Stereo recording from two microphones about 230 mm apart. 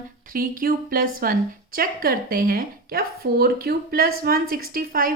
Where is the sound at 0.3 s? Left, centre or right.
Right.